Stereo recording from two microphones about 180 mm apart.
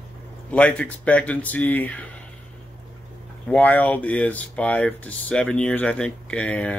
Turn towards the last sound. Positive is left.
turn(degrees=5)  # may be behind; listen again after turning